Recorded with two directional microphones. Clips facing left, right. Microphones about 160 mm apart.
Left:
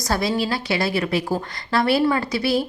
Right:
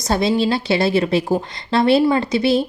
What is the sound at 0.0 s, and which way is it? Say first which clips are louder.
A woman's voice: right 5 dB; 25° right (ahead or behind).